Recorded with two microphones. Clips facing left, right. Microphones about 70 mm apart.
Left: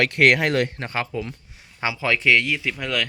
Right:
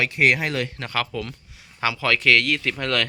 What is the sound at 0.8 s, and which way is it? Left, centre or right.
Speech, left.